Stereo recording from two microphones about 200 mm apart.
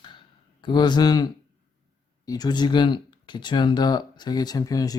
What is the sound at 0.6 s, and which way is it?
Speech, 20° left (ahead or behind).